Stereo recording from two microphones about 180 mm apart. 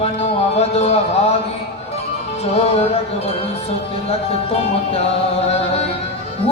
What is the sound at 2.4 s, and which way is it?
Speech, 35° left (ahead or behind).